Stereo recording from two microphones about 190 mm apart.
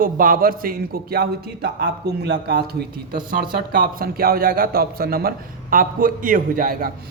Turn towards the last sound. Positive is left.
turn(degrees=-50)  # may be behind; listen again after turning